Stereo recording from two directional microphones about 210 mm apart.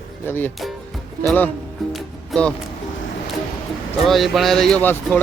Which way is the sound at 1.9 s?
5° left (ahead or behind).